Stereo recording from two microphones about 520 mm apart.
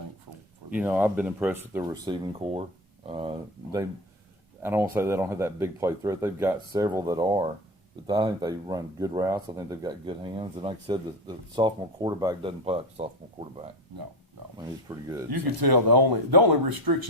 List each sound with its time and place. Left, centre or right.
0.7 s speech: centre
14.9 s speech: centre
15.3 s speech: right